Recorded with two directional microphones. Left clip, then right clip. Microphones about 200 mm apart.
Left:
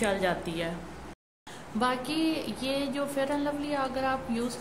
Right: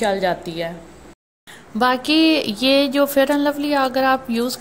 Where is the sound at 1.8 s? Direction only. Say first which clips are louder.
Right 13 dB; 40° right (ahead or behind).